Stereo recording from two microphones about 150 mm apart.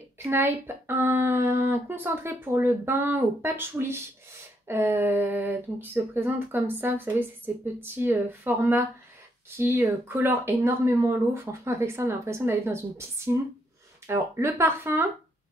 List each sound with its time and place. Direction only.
0.2 s speech: 15° right (ahead or behind)